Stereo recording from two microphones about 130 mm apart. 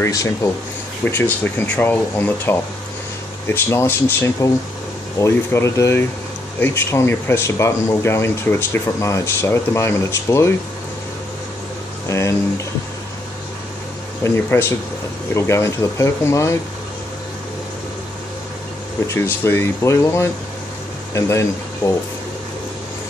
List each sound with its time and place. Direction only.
0.0 s speech: 25° left (ahead or behind)
12.1 s speech: 20° left (ahead or behind)
14.2 s speech: 20° left (ahead or behind)
19.0 s speech: 20° left (ahead or behind)